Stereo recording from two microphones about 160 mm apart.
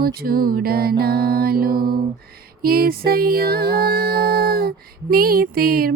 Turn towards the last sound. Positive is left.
turn(degrees=-70)  # may be behind; listen again after turning